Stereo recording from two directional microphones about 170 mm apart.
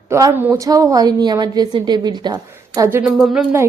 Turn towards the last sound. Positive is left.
turn(degrees=0)  # may be behind; listen again after turning